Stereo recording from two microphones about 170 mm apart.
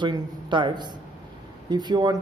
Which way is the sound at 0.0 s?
25° right (ahead or behind).